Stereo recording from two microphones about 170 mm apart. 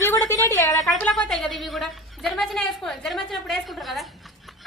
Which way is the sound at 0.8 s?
5° left (ahead or behind).